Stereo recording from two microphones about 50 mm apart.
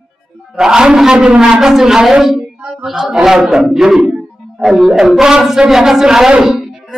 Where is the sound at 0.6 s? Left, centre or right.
Centre.